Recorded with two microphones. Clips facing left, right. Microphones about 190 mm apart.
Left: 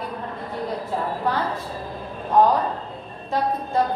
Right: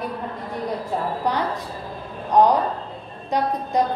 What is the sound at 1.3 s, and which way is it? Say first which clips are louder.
A woman's voice: right 1 dB; 15° right (ahead or behind).